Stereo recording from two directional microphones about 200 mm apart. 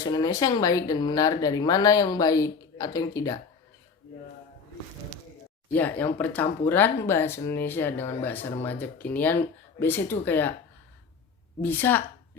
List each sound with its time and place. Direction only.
0.0 s speech: 15° left (ahead or behind)
5.7 s speech: 10° left (ahead or behind)
11.6 s speech: 10° left (ahead or behind)